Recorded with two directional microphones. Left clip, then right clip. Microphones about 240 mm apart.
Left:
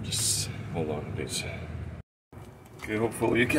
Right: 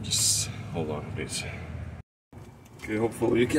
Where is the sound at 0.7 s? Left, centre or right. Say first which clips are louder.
Left 1 dB; centre.